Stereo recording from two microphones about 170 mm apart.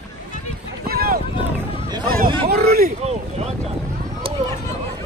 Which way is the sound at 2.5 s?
65° right (ahead or behind).